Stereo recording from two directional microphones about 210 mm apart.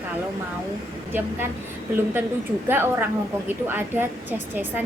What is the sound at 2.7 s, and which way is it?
A woman's voice, 10° right (ahead or behind).